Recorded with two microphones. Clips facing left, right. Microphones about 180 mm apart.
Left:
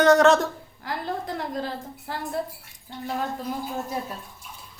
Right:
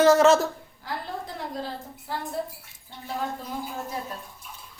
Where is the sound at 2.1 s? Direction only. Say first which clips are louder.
Right 1 dB; 70° left (ahead or behind).